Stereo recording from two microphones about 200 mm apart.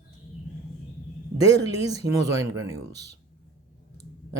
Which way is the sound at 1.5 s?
20° right (ahead or behind).